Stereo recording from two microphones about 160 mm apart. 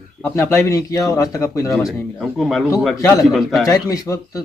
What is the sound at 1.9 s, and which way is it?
Speech, centre (ahead or behind).